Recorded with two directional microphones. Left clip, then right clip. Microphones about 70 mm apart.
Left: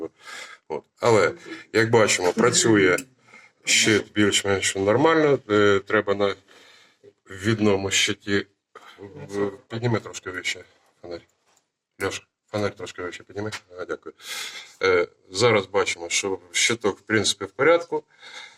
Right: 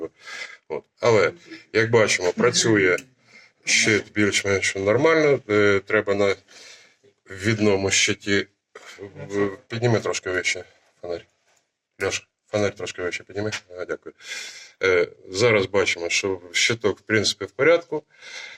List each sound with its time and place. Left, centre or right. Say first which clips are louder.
0.0 s a sound: right 2 dB; centre
1.4 s a man's voice: even; centre
5.5 s speech: even; right
8.2 s a sound: right 2 dB; right
9.0 s speech: right 2 dB; centre
9.6 s speech: right 5 dB; right
11.9 s speech: right 3 dB; right
14.2 s speech: left 1 dB; centre